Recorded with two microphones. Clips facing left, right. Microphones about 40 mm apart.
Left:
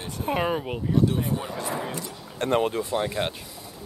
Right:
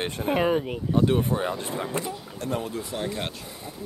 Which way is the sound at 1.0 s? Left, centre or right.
Right.